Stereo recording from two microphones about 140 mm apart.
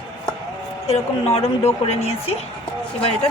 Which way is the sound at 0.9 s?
45° left (ahead or behind).